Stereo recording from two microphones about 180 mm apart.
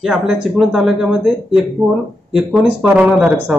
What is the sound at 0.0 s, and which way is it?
A man's voice, centre (ahead or behind).